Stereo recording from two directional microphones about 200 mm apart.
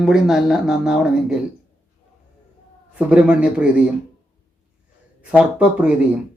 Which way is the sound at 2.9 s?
5° right (ahead or behind).